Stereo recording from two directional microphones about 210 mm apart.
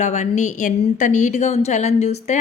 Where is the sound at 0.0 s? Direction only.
35° left (ahead or behind).